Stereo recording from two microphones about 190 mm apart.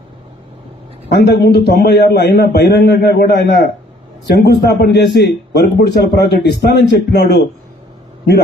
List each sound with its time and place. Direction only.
1.1 s a man's voice: 60° left (ahead or behind)